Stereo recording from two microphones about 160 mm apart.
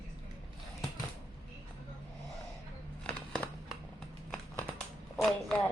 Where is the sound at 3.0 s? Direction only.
5° left (ahead or behind).